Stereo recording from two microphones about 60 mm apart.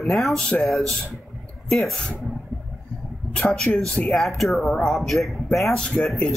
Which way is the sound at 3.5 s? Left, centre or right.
Centre.